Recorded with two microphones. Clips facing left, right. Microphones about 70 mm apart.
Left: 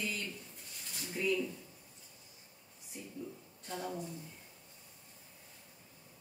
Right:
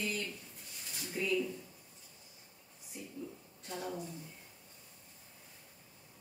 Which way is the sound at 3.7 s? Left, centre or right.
Centre.